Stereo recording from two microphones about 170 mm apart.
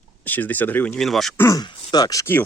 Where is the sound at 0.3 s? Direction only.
10° left (ahead or behind).